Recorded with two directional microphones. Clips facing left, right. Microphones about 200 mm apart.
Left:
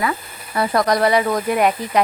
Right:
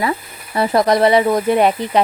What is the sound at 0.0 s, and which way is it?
A woman's voice, 25° right (ahead or behind).